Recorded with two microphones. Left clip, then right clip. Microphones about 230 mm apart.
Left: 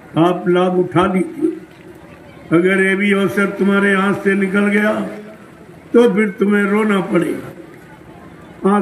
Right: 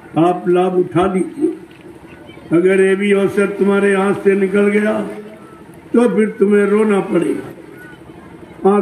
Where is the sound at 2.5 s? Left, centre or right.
Left.